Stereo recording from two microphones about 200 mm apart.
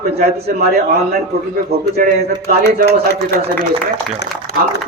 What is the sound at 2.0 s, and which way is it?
Speech, 45° right (ahead or behind).